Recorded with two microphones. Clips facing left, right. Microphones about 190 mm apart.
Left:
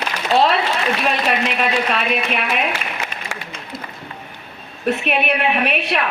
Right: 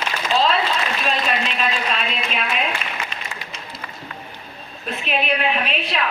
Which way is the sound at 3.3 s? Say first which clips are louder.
Left 4 dB; 90° left.